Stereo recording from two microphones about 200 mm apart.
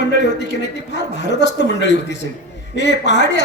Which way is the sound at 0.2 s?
60° left (ahead or behind).